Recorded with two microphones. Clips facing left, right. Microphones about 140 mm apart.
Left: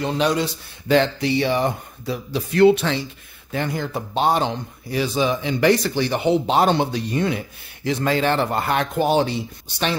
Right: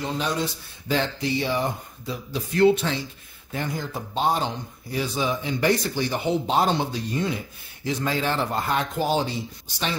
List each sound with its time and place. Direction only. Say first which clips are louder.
0.0 s a man's voice: left 6 dB; 75° left (ahead or behind)